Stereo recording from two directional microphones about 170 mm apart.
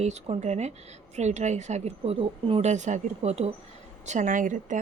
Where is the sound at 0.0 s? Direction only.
40° right (ahead or behind).